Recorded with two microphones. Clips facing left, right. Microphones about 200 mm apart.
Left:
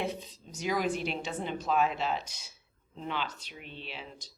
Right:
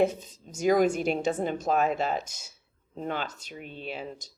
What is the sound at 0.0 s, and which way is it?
Speech, 45° right (ahead or behind).